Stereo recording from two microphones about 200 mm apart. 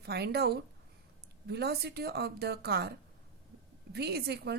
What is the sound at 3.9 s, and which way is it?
Speech, 55° right (ahead or behind).